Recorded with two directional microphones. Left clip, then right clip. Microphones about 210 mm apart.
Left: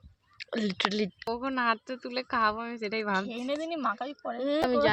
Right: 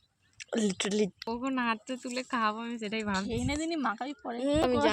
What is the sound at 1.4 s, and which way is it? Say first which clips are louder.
Speech: left 3 dB; 50° left (ahead or behind).